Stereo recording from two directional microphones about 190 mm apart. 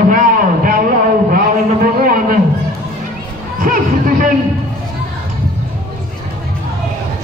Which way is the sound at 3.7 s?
45° right (ahead or behind).